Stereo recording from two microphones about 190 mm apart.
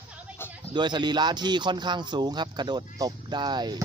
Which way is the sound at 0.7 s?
25° right (ahead or behind).